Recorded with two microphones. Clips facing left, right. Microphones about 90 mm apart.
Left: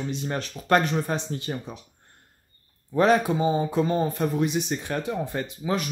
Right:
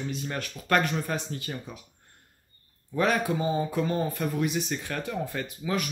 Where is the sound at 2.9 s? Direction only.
30° left (ahead or behind).